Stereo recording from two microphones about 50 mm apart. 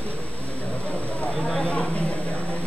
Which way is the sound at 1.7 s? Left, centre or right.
Left.